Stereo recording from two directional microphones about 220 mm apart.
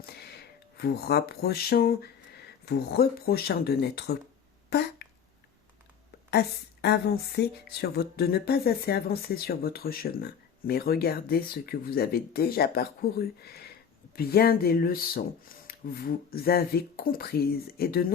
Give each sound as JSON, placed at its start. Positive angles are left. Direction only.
{"t": 0.0, "sound": "speech", "side_deg": 45}
{"t": 4.7, "sound": "a sound", "side_deg": 50}
{"t": 6.8, "sound": "speech", "side_deg": 45}